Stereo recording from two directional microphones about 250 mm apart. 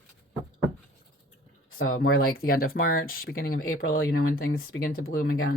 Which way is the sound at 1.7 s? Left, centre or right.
Left.